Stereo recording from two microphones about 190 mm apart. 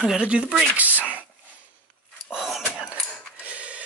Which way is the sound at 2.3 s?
Centre (ahead or behind).